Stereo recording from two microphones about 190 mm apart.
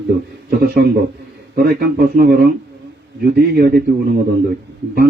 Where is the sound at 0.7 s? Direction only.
50° right (ahead or behind).